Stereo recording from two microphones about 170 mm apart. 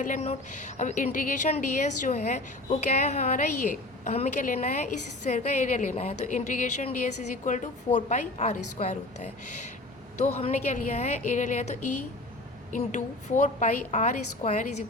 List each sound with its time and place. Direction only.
0.0 s a woman's voice: 40° left (ahead or behind)
10.2 s a woman's voice: 40° left (ahead or behind)